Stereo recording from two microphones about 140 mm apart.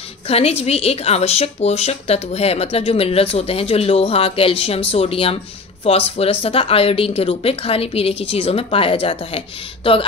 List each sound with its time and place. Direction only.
0.3 s a woman's voice: 45° left (ahead or behind)